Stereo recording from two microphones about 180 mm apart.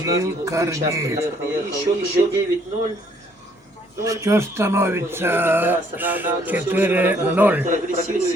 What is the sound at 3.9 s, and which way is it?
Speech, 15° right (ahead or behind).